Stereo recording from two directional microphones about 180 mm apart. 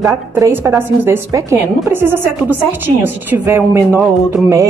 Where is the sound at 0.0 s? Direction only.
10° right (ahead or behind).